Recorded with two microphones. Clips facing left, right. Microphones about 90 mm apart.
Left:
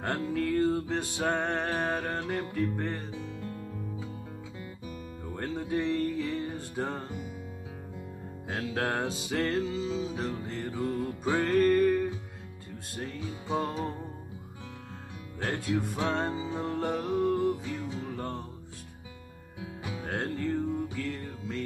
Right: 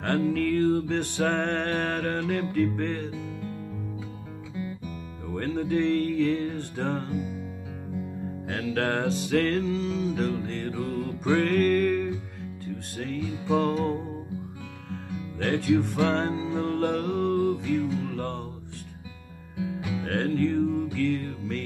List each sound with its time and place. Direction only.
0.0 s music: 10° left (ahead or behind)
5.3 s music: 5° left (ahead or behind)
8.5 s music: 10° left (ahead or behind)
15.3 s music: 10° left (ahead or behind)
19.6 s music: 25° left (ahead or behind)